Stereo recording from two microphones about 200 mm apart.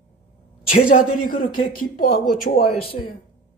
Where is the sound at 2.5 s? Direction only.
30° left (ahead or behind).